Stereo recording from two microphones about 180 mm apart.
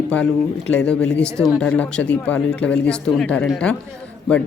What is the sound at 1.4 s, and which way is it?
Speech, 5° left (ahead or behind).